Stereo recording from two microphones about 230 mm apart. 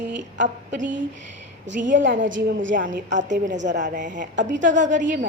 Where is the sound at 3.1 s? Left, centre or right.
Right.